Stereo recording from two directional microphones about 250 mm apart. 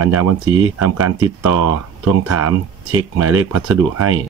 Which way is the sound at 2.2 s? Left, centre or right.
Right.